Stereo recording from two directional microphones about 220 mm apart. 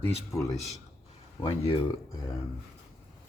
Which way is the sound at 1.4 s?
25° left (ahead or behind).